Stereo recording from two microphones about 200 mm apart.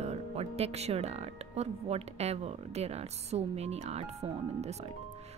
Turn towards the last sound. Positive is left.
turn(degrees=-30)  # may be behind; listen again after turning